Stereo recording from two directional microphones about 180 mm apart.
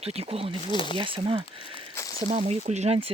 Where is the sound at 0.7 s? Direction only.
25° left (ahead or behind).